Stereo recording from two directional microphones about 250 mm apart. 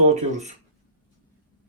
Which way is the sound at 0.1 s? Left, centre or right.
Right.